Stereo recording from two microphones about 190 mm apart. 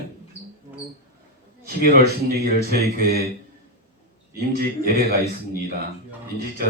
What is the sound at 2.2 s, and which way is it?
Speech, 55° right (ahead or behind).